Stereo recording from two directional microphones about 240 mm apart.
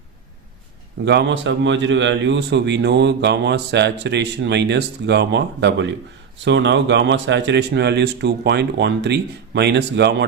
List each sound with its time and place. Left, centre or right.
1.0 s speech: right